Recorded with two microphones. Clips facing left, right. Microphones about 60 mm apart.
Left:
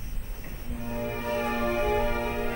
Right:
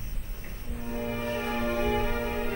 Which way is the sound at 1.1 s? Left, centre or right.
Left.